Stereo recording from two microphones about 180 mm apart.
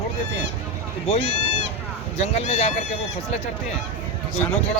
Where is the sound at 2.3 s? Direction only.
35° left (ahead or behind).